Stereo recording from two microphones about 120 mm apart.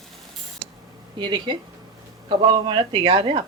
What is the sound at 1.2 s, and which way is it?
A woman's voice, 40° right (ahead or behind).